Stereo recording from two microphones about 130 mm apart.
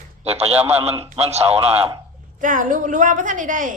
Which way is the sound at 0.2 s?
55° right (ahead or behind).